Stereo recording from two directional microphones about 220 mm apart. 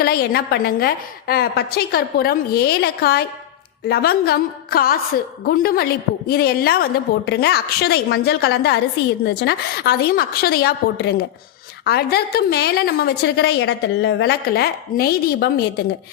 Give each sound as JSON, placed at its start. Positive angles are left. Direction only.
{"t": 0.0, "sound": "a woman's voice", "side_deg": 45}